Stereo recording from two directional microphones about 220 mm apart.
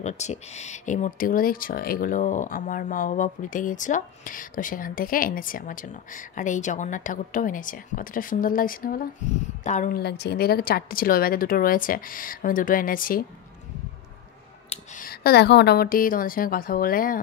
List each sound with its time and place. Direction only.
0.0 s speech: 30° left (ahead or behind)
14.7 s speech: 40° left (ahead or behind)